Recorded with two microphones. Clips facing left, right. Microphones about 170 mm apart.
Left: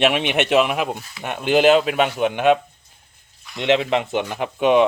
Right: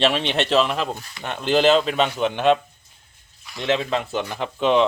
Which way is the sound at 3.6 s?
20° left (ahead or behind).